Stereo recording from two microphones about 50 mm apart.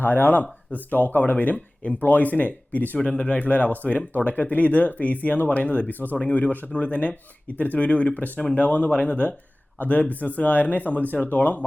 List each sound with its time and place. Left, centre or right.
0.0 s speech: left